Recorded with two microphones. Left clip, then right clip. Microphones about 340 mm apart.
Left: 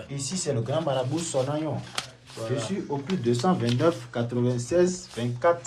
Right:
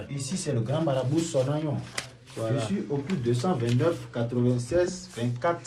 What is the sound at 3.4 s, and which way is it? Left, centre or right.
Speech, left.